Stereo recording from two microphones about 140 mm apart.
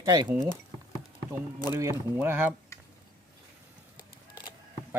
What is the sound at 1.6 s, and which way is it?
Speech, 20° right (ahead or behind).